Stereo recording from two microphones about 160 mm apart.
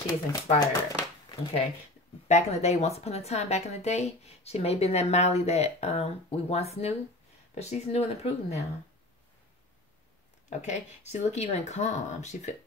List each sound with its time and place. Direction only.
0.0 s speech: 25° left (ahead or behind)
1.3 s speech: 35° left (ahead or behind)
2.2 s speech: 45° left (ahead or behind)
10.5 s speech: 45° left (ahead or behind)